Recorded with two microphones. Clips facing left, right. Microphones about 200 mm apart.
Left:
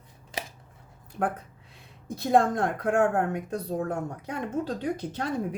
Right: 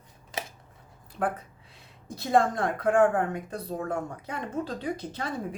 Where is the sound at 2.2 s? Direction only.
55° left (ahead or behind).